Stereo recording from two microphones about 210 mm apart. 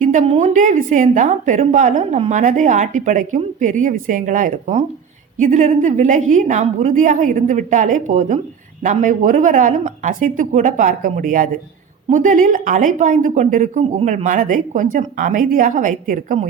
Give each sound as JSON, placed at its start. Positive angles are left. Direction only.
{"t": 0.0, "sound": "a woman's voice", "side_deg": -35}